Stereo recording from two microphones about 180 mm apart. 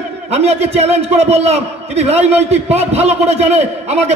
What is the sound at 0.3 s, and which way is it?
A man's voice, 35° right (ahead or behind).